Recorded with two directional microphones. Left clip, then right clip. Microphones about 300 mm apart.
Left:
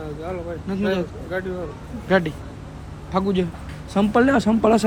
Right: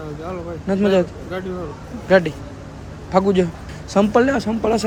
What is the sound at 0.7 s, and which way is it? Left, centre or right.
Speech, centre.